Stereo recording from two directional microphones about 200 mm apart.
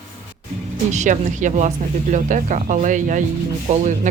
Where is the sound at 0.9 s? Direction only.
40° right (ahead or behind).